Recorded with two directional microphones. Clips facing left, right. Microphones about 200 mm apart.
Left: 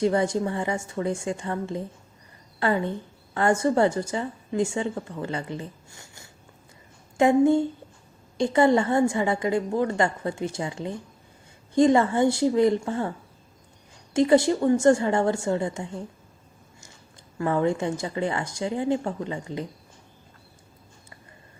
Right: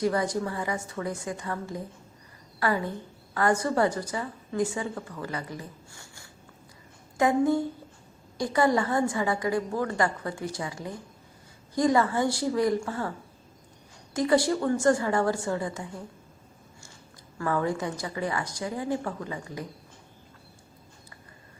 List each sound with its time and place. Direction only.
0.0 s a woman's voice: 25° left (ahead or behind)
17.3 s a woman's voice: 20° left (ahead or behind)